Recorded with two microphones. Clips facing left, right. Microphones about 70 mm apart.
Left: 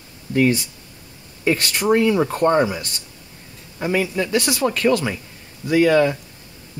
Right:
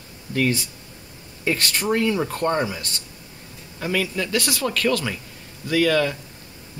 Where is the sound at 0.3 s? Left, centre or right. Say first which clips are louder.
Left 5 dB; left.